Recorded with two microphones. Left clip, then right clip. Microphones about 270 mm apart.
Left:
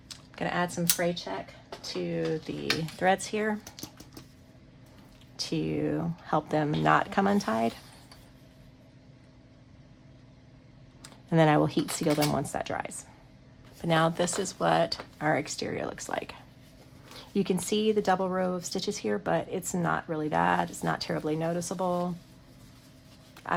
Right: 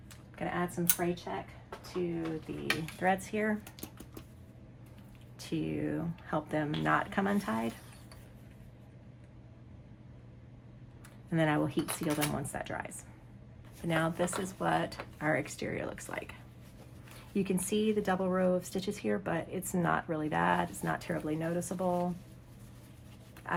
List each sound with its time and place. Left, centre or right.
0.1 s speech: left
3.0 s speech: centre
5.5 s speech: centre
11.3 s speech: centre
17.3 s speech: centre
23.4 s a sound: centre